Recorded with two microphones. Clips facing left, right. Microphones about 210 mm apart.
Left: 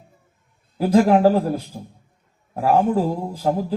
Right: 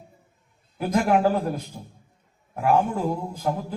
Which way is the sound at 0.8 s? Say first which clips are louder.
Left 6 dB; 30° left (ahead or behind).